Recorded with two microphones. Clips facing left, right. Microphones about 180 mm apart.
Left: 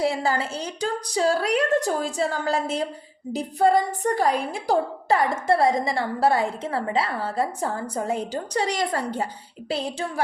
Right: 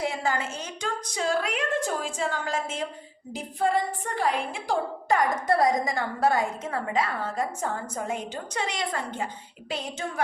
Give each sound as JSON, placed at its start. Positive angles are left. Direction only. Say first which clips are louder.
{"t": 0.0, "sound": "a woman's voice", "louder": "left 5 dB", "side_deg": 35}